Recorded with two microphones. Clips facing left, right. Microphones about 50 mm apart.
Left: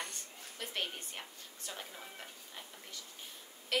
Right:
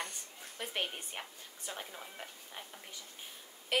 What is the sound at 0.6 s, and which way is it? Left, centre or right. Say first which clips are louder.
A woman's voice: right 2 dB; centre.